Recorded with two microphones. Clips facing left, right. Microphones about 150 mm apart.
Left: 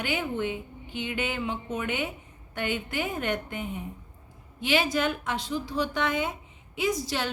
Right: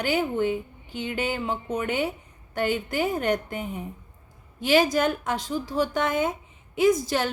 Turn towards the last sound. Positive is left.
turn(degrees=-50)  # may be behind; listen again after turning